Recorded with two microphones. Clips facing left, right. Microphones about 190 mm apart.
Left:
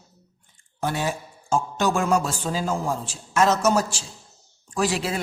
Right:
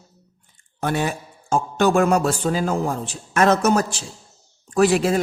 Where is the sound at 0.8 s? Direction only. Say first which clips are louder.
Right 3 dB; 60° right (ahead or behind).